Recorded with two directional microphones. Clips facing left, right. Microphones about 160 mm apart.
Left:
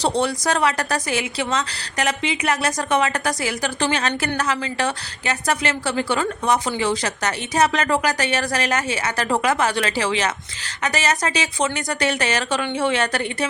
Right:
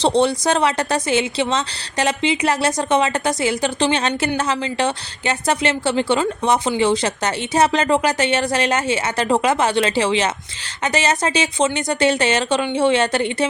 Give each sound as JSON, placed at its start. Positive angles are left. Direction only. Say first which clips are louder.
{"t": 0.0, "sound": "a woman's voice", "louder": "right 4 dB", "side_deg": -25}